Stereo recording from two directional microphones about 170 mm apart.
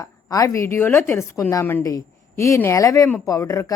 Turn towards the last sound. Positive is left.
turn(degrees=15)  # may be behind; listen again after turning